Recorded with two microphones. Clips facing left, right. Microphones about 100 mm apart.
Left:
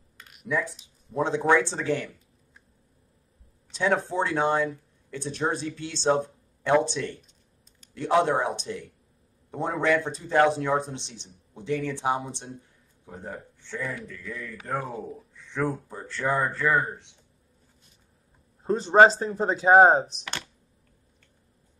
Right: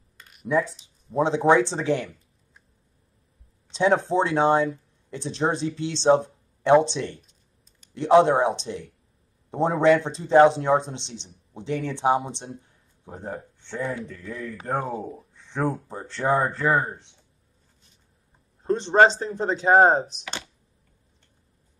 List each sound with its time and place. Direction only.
0.2 s a sound: centre (ahead or behind)
1.1 s speech: 20° right (ahead or behind)
3.7 s a man's voice: 25° right (ahead or behind)
18.6 s speech: 5° left (ahead or behind)